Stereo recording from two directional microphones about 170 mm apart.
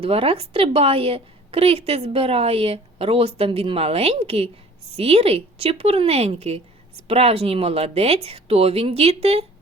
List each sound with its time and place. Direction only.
0.0 s a woman's voice: 35° right (ahead or behind)